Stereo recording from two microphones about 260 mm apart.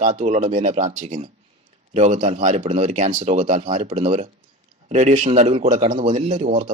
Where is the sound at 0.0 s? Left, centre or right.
Right.